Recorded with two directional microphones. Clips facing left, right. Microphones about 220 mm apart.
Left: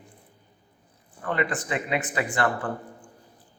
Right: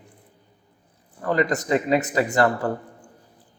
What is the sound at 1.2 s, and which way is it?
A man's voice, 40° right (ahead or behind).